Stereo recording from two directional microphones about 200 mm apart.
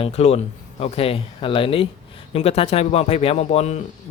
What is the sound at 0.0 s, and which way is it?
A man's voice, 30° left (ahead or behind).